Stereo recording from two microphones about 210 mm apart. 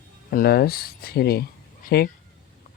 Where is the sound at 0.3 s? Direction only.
45° left (ahead or behind).